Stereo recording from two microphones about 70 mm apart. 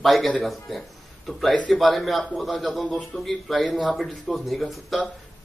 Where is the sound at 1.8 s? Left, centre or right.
Centre.